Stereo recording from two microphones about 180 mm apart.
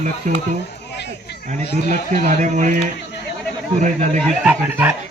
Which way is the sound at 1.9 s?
40° right (ahead or behind).